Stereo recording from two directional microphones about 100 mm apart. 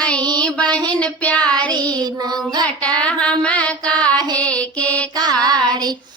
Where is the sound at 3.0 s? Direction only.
10° left (ahead or behind).